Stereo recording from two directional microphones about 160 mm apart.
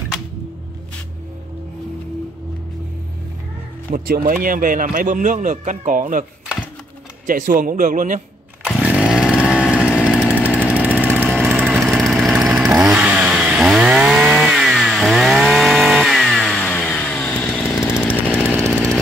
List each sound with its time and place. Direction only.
3.9 s a man's voice: 60° right (ahead or behind)
7.2 s a man's voice: 55° right (ahead or behind)
8.8 s chainsaw: 5° right (ahead or behind)
11.0 s vehicle: 10° right (ahead or behind); by 17.9 s 15° left (ahead or behind)
18.0 s chainsaw: 5° left (ahead or behind)